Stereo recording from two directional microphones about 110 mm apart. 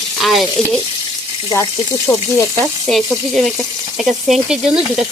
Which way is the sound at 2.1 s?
20° left (ahead or behind).